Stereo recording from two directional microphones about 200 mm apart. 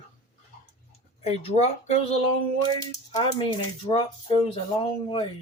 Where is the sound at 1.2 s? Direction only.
30° left (ahead or behind).